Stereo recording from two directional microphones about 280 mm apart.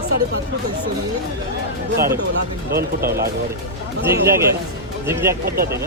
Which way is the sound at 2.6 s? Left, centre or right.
Right.